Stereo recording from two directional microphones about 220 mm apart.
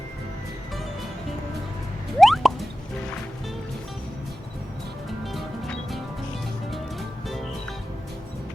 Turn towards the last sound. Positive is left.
turn(degrees=0)  # may be behind; listen again after turning